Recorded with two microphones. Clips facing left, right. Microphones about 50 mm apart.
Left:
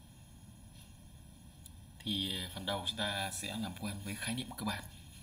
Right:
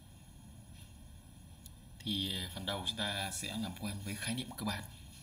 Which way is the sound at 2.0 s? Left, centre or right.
Centre.